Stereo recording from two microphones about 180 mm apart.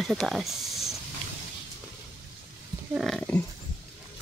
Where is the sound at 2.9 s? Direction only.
Centre (ahead or behind).